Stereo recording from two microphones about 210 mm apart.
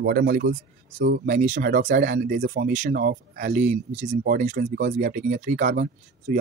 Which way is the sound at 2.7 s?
40° right (ahead or behind).